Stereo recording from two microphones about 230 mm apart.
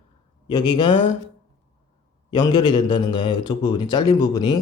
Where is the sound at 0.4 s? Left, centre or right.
Centre.